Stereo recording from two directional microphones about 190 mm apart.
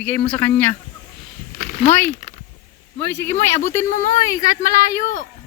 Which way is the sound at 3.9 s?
45° left (ahead or behind).